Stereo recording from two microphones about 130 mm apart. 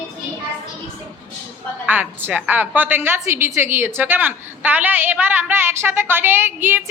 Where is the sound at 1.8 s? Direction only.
15° right (ahead or behind).